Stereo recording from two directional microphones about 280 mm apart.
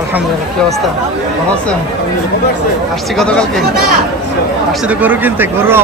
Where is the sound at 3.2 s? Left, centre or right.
Centre.